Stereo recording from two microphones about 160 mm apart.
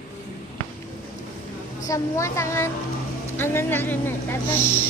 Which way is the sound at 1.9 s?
20° left (ahead or behind).